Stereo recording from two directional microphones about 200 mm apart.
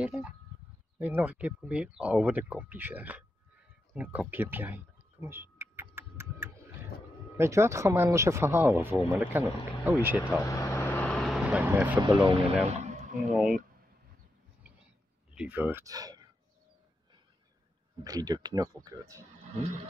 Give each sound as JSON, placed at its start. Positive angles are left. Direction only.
{"t": 0.0, "sound": "a sound", "side_deg": -5}
{"t": 0.9, "sound": "speech", "side_deg": -10}
{"t": 3.9, "sound": "a sound", "side_deg": -5}
{"t": 7.3, "sound": "speech", "side_deg": -15}
{"t": 10.2, "sound": "vehicle", "side_deg": 15}
{"t": 12.0, "sound": "speech", "side_deg": -20}
{"t": 12.7, "sound": "a sound", "side_deg": -35}
{"t": 13.3, "sound": "speech", "side_deg": -5}
{"t": 15.3, "sound": "speech", "side_deg": -10}
{"t": 18.0, "sound": "speech", "side_deg": -20}